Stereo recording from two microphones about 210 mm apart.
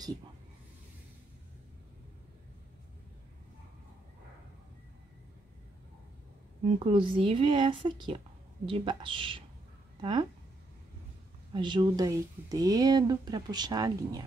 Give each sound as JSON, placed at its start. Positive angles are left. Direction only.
{"t": 6.6, "sound": "speech", "side_deg": -25}
{"t": 11.5, "sound": "speech", "side_deg": -20}